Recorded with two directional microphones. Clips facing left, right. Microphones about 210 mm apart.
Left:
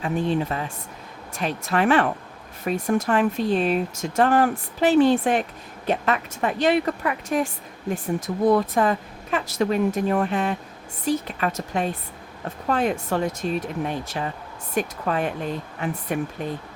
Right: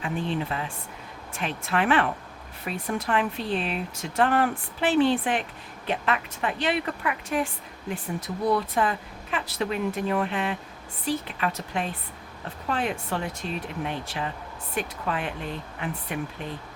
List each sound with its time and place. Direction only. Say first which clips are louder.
0.0 s speech: left 5 dB; 40° left (ahead or behind)